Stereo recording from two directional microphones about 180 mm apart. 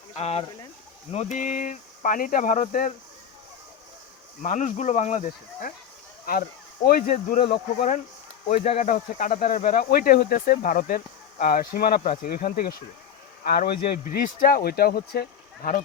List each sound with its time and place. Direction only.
0.2 s speech: 35° left (ahead or behind)
4.4 s speech: 40° left (ahead or behind)
7.3 s speech: 35° left (ahead or behind); by 15.8 s 55° left (ahead or behind)